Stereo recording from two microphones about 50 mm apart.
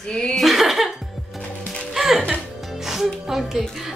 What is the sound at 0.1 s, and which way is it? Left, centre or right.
Speech, centre.